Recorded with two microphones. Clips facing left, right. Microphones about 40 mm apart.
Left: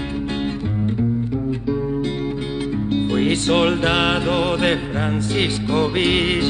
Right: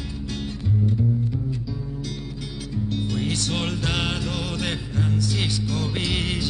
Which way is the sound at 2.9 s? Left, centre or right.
Left.